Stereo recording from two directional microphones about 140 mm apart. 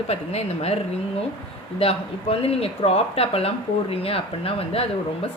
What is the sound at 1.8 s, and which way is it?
A woman's voice, 45° left (ahead or behind).